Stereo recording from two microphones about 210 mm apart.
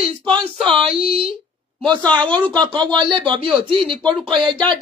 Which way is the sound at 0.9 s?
25° right (ahead or behind).